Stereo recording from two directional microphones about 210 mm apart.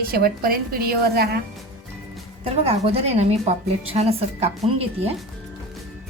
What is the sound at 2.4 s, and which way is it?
A woman's voice, 30° right (ahead or behind).